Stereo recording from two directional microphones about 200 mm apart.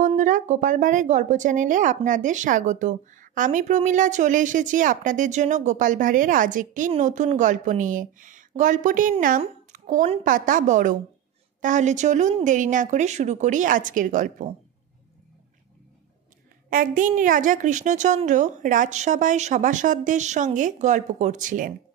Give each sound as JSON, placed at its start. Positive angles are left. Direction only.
{"t": 0.0, "sound": "a woman's voice", "side_deg": -40}
{"t": 16.7, "sound": "speech", "side_deg": -40}